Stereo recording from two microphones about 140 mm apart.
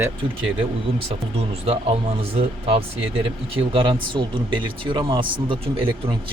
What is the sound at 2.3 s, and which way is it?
Speech, 45° right (ahead or behind).